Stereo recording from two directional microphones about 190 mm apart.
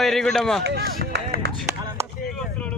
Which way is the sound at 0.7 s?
60° right (ahead or behind).